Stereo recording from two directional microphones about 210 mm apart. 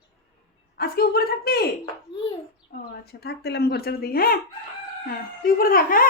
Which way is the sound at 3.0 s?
50° left (ahead or behind).